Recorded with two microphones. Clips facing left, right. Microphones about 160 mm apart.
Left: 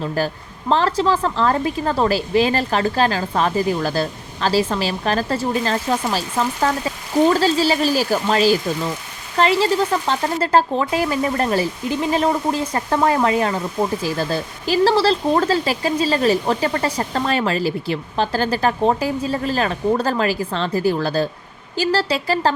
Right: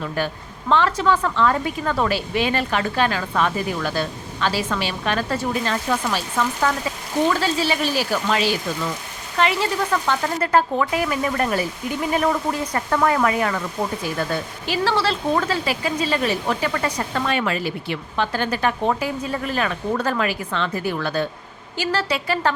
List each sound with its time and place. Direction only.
0.2 s speech: 35° left (ahead or behind)